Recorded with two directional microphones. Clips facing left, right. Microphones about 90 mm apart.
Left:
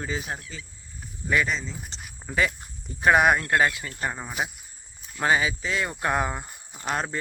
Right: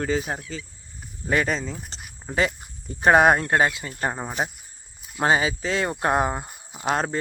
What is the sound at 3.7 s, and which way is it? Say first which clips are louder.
Speech: right 1 dB; 20° right (ahead or behind).